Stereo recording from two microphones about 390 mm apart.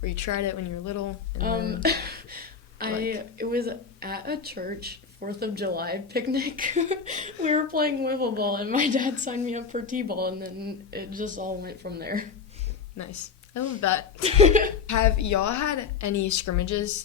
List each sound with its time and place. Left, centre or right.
0.0 s a woman's voice: left
1.4 s speech: right
13.0 s speech: left
14.2 s speech: centre
14.8 s a woman's voice: left